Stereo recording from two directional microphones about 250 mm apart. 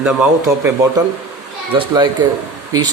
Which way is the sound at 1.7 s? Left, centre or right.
Centre.